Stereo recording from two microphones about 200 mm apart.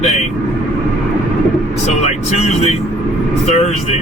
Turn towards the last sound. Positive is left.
turn(degrees=35)  # may be behind; listen again after turning